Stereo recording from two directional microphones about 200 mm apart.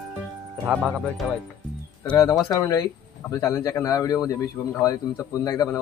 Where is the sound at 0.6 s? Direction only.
Centre (ahead or behind).